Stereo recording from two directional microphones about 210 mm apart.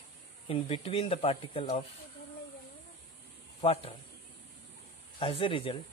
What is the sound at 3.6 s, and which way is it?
Speech, 30° left (ahead or behind).